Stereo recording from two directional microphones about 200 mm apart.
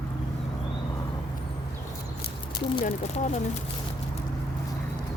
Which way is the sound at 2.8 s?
35° left (ahead or behind).